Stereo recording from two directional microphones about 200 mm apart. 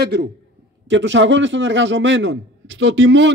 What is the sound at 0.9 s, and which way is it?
A man's voice, 65° right (ahead or behind).